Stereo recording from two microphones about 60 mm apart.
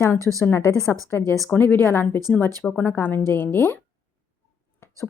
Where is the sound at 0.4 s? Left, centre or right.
Left.